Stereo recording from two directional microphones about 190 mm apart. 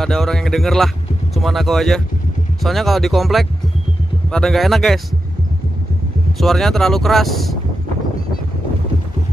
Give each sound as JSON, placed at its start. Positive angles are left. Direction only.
{"t": 0.0, "sound": "speech", "side_deg": 0}
{"t": 6.3, "sound": "speech", "side_deg": 0}